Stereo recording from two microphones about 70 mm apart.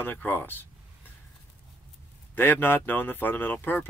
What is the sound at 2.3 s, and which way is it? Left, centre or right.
Speech, left.